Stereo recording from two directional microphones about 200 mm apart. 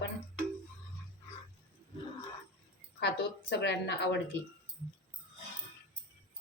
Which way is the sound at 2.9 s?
60° left (ahead or behind).